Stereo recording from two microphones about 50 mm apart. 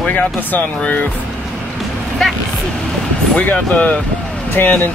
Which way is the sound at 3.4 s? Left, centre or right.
Left.